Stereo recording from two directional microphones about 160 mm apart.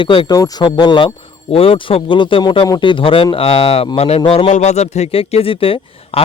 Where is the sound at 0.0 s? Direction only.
30° left (ahead or behind).